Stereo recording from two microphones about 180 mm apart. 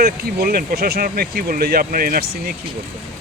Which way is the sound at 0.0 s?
55° right (ahead or behind).